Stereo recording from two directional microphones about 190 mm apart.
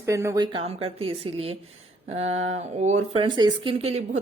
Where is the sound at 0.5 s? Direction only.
30° right (ahead or behind).